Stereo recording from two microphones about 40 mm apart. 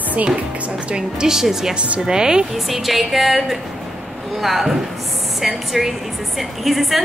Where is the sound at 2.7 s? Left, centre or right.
Centre.